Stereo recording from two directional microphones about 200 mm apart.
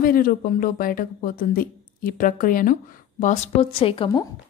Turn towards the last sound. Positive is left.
turn(degrees=25)  # may be behind; listen again after turning